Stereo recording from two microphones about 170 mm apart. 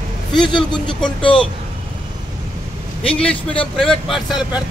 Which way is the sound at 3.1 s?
5° left (ahead or behind).